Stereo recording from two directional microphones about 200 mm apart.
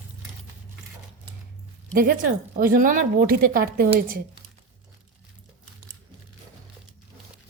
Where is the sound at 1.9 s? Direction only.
45° right (ahead or behind).